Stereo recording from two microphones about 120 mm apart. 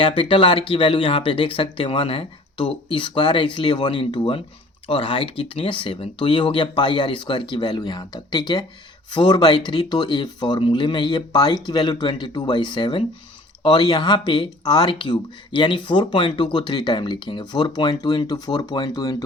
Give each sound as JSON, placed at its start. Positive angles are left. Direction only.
{"t": 0.0, "sound": "speech", "side_deg": 45}